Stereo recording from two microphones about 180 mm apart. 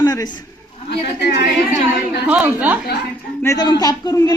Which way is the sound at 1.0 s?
70° left (ahead or behind).